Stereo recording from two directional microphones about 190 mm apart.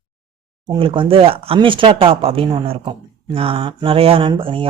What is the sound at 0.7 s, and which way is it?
Speech, 25° right (ahead or behind).